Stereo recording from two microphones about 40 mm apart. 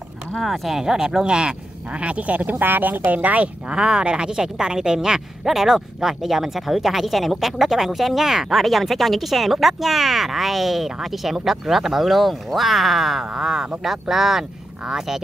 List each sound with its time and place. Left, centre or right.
0.4 s speech: centre
2.0 s speech: right
2.6 s speech: right
3.1 s speech: right
3.7 s a woman's voice: right; by 13.2 s centre
13.2 s speech: centre